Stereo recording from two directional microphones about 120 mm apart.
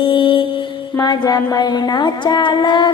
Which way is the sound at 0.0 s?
45° left (ahead or behind).